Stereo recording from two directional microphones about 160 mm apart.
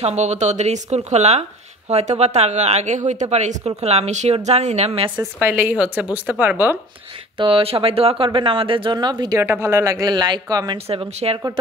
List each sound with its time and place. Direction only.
0.0 s a woman's voice: 45° right (ahead or behind)
5.1 s a woman's voice: 15° right (ahead or behind)
7.3 s speech: 35° right (ahead or behind)
9.4 s speech: 15° right (ahead or behind)
10.9 s speech: 40° right (ahead or behind)